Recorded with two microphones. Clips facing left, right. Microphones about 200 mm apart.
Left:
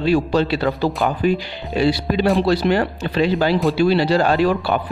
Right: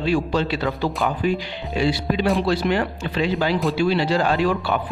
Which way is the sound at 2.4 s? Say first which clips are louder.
Left 4 dB; 35° left (ahead or behind).